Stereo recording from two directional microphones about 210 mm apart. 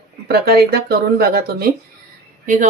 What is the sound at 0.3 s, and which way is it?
Speech, 50° right (ahead or behind).